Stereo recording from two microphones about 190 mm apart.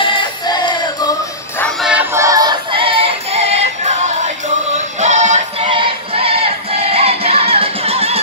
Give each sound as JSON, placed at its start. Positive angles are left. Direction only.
{"t": 0.0, "sound": "music", "side_deg": 25}
{"t": 1.6, "sound": "music", "side_deg": 0}
{"t": 2.1, "sound": "music", "side_deg": -20}
{"t": 5.7, "sound": "music", "side_deg": -30}